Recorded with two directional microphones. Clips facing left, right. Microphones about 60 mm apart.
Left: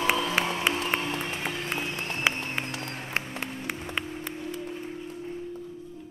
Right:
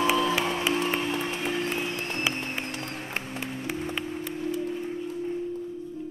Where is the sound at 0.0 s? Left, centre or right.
Left.